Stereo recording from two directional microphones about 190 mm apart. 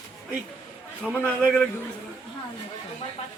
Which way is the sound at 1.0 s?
5° left (ahead or behind).